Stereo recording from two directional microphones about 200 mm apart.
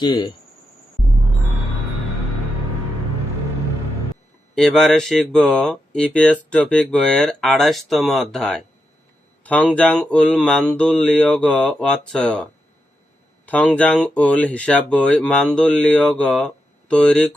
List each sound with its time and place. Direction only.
0.0 s speech: 20° left (ahead or behind)
4.5 s speech: centre (ahead or behind)
9.4 s a sound: 5° left (ahead or behind)
9.7 s speech: 5° left (ahead or behind)